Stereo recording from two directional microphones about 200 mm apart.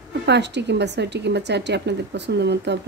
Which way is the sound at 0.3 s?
60° right (ahead or behind).